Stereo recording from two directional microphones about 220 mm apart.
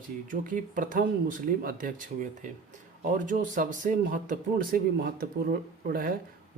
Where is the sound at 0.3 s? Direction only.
35° right (ahead or behind).